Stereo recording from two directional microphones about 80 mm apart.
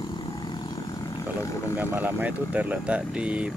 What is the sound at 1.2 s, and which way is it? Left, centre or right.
Vehicle, left.